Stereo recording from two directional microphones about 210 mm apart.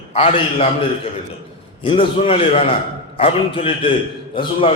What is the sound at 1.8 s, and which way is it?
A man's voice, 25° left (ahead or behind).